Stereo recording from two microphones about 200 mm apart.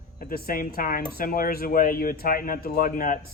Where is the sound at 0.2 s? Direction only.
45° left (ahead or behind).